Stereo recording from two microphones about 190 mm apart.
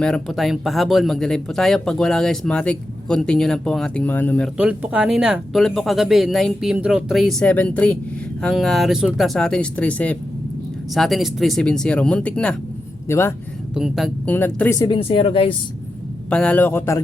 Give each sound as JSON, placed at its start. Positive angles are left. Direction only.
{"t": 0.0, "sound": "speech", "side_deg": 0}
{"t": 4.5, "sound": "speech", "side_deg": -5}
{"t": 13.7, "sound": "speech", "side_deg": 0}
{"t": 14.3, "sound": "a man's voice", "side_deg": 10}
{"t": 14.8, "sound": "speech", "side_deg": 25}
{"t": 16.3, "sound": "a man's voice", "side_deg": 5}